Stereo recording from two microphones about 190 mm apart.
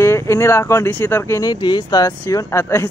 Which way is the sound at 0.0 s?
15° left (ahead or behind).